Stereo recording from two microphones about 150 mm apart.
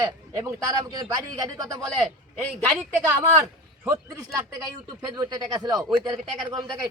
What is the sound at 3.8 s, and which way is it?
Speech, 20° right (ahead or behind).